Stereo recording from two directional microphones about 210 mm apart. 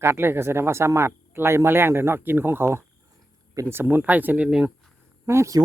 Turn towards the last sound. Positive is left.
turn(degrees=-15)  # may be behind; listen again after turning